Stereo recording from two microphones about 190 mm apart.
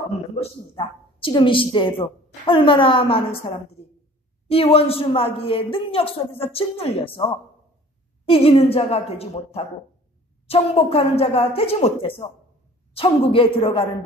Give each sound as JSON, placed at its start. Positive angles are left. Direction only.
{"t": 0.4, "sound": "speech", "side_deg": 30}
{"t": 3.8, "sound": "a sound", "side_deg": 30}
{"t": 4.5, "sound": "speech", "side_deg": 30}
{"t": 8.3, "sound": "a woman's voice", "side_deg": 30}